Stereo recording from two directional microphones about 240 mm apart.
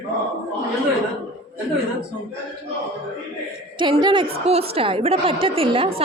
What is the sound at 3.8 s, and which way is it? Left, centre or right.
Speech, centre.